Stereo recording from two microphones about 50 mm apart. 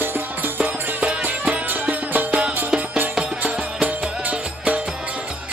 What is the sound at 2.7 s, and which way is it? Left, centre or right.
Music, centre.